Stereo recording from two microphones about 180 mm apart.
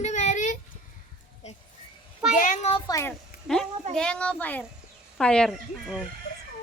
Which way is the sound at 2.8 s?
15° left (ahead or behind).